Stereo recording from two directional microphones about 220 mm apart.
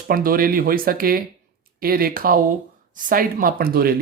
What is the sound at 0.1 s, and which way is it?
Speech, 40° right (ahead or behind).